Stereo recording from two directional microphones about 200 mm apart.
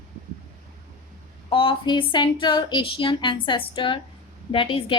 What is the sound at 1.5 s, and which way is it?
A woman's voice, 25° left (ahead or behind).